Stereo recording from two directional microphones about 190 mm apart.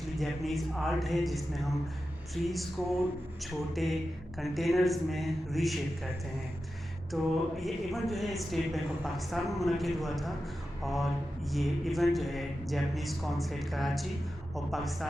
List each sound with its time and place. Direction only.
0.2 s a woman's voice: centre (ahead or behind)
7.1 s a woman's voice: centre (ahead or behind)